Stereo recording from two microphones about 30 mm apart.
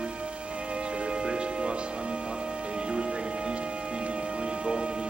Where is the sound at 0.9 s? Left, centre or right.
Right.